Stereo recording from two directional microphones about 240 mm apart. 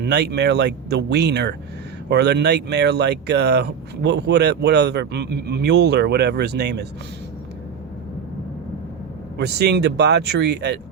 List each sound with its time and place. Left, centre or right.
0.0 s speech: right
9.4 s speech: right